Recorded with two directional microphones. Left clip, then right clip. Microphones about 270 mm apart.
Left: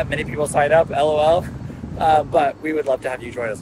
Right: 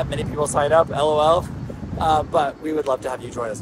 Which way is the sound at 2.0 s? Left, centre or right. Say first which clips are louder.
Left 3 dB; centre.